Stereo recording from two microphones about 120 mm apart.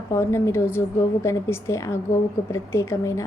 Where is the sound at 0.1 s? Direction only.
20° left (ahead or behind).